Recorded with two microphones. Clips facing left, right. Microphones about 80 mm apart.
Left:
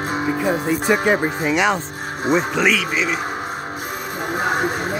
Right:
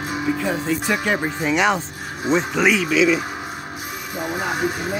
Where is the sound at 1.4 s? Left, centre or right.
Centre.